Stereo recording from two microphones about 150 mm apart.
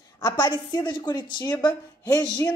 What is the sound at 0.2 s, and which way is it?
A woman's voice, 25° left (ahead or behind).